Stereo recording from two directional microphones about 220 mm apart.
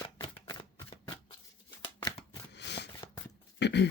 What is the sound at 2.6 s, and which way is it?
Shuffling cards, 50° left (ahead or behind).